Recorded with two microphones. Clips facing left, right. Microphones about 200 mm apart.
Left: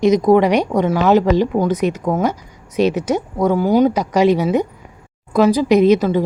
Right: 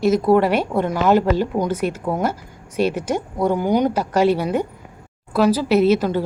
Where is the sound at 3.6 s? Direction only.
5° left (ahead or behind).